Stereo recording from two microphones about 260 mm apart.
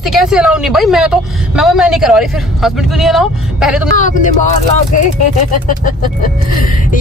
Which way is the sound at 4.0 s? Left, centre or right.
Left.